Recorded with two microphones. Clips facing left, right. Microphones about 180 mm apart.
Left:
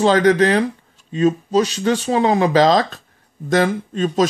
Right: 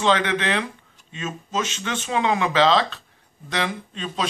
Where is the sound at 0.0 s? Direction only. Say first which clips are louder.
Left 8 dB; 40° left (ahead or behind).